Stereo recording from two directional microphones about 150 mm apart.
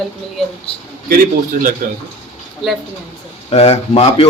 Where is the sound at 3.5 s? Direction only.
40° left (ahead or behind).